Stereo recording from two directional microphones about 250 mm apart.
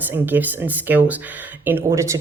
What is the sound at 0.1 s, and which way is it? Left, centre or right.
Speech, centre.